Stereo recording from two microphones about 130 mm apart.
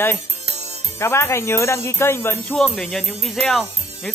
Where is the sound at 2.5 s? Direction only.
Centre (ahead or behind).